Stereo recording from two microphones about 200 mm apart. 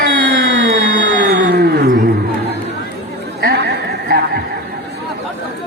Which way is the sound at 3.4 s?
50° right (ahead or behind).